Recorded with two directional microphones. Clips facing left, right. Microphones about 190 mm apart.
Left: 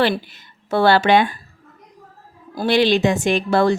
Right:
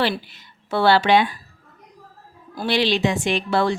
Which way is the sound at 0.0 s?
45° left (ahead or behind).